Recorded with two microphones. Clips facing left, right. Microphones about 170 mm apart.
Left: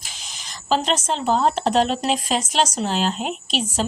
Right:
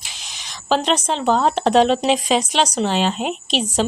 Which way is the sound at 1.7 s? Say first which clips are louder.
Right 4 dB; 75° right (ahead or behind).